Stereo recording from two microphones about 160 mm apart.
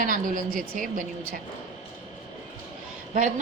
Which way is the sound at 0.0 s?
60° right (ahead or behind).